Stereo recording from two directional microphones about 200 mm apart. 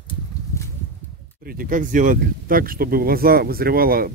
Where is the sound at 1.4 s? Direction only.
45° right (ahead or behind).